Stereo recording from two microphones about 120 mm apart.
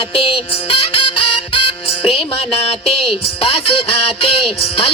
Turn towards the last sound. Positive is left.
turn(degrees=50)  # may be behind; listen again after turning